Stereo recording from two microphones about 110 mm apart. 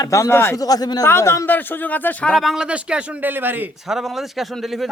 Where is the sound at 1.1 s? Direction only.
25° left (ahead or behind); by 3.6 s 20° right (ahead or behind).